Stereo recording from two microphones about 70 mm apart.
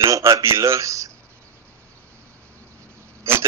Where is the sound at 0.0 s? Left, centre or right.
Right.